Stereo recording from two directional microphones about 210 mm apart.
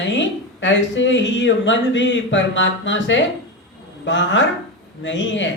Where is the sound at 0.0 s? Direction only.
60° left (ahead or behind).